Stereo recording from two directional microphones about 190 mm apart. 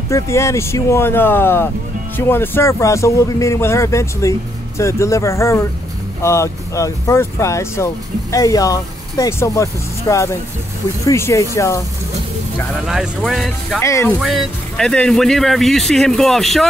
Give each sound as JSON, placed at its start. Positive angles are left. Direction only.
{"t": 0.1, "sound": "speech", "side_deg": 15}
{"t": 12.8, "sound": "speech", "side_deg": 0}
{"t": 13.8, "sound": "speech", "side_deg": 15}
{"t": 14.2, "sound": "speech", "side_deg": 0}